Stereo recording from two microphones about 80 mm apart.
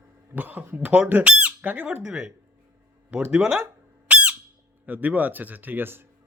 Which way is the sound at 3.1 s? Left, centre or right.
Centre.